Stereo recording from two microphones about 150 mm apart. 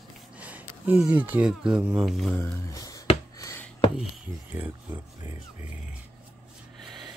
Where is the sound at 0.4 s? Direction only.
10° right (ahead or behind).